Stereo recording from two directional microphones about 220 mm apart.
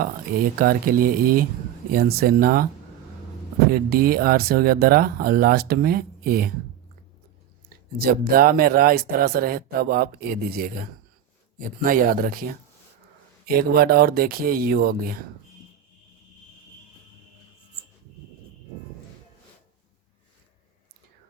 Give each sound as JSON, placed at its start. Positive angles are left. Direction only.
{"t": 0.0, "sound": "speech", "side_deg": -40}
{"t": 3.7, "sound": "speech", "side_deg": -40}
{"t": 8.0, "sound": "speech", "side_deg": -40}